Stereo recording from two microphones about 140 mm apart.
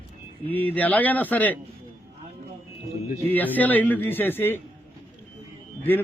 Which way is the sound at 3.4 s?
10° left (ahead or behind).